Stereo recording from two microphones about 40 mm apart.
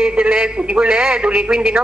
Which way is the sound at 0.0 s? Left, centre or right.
Right.